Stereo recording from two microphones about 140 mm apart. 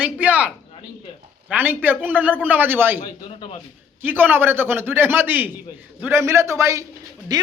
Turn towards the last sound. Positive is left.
turn(degrees=-30)  # may be behind; listen again after turning